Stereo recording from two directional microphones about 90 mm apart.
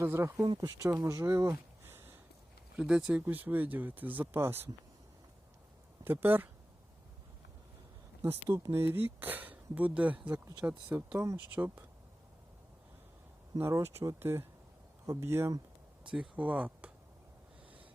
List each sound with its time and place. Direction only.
0.0 s speech: 30° right (ahead or behind)
0.4 s speech: 65° right (ahead or behind)
0.9 s speech: 35° right (ahead or behind)
2.7 s speech: 10° right (ahead or behind)
3.2 s speech: 20° right (ahead or behind)
6.1 s speech: 20° right (ahead or behind)
8.2 s speech: 30° right (ahead or behind)
13.6 s speech: 30° right (ahead or behind)
16.0 s speech: 10° right (ahead or behind)